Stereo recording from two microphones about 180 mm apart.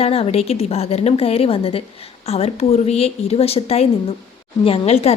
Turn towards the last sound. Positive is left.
turn(degrees=35)  # may be behind; listen again after turning